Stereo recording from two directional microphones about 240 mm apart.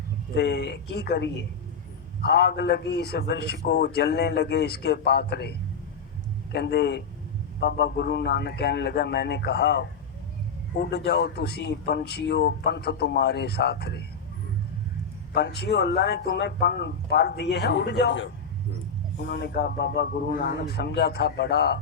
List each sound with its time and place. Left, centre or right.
0.3 s a man's voice: left
15.3 s a man's voice: left